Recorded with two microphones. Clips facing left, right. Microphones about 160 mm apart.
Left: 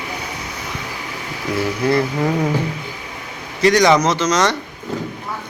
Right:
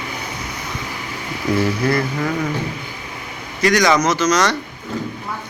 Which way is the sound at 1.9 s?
25° left (ahead or behind).